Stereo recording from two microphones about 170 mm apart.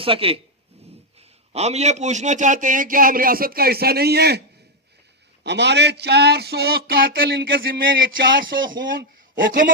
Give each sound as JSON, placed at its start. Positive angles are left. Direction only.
{"t": 0.0, "sound": "a man's voice", "side_deg": -30}
{"t": 1.5, "sound": "a man's voice", "side_deg": -40}
{"t": 5.4, "sound": "speech", "side_deg": -90}
{"t": 8.8, "sound": "a man's voice", "side_deg": -55}